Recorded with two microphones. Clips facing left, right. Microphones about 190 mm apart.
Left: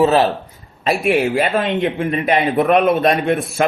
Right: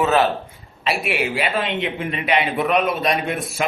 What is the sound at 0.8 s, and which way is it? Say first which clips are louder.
Speech: left 7 dB; 45° left (ahead or behind).